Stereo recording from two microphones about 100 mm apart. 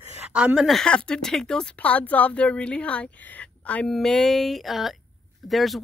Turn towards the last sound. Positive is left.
turn(degrees=0)  # may be behind; listen again after turning